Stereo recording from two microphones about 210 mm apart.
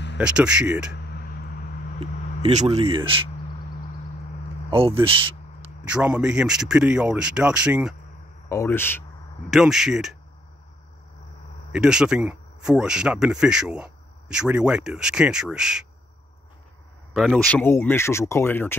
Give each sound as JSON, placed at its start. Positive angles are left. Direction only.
{"t": 0.2, "sound": "speech", "side_deg": -5}
{"t": 2.0, "sound": "speech", "side_deg": -30}
{"t": 4.6, "sound": "speech", "side_deg": -25}
{"t": 5.9, "sound": "speech", "side_deg": -5}
{"t": 8.5, "sound": "speech", "side_deg": 10}
{"t": 9.5, "sound": "speech", "side_deg": 0}
{"t": 11.7, "sound": "speech", "side_deg": -5}
{"t": 17.1, "sound": "speech", "side_deg": 0}